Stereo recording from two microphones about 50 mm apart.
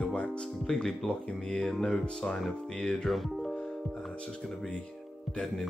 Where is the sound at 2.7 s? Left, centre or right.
Left.